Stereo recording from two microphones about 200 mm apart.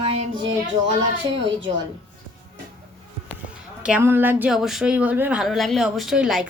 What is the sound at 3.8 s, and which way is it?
A woman's voice, 10° right (ahead or behind).